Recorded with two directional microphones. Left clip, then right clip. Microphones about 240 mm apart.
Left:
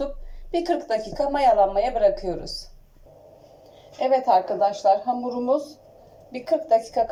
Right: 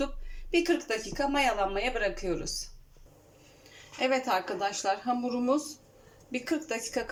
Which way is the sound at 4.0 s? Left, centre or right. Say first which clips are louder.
Left 9 dB; right.